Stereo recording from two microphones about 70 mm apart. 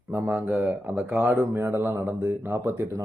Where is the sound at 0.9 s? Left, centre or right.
Centre.